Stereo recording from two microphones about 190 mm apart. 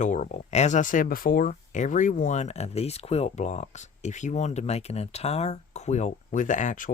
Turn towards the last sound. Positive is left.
turn(degrees=45)  # may be behind; listen again after turning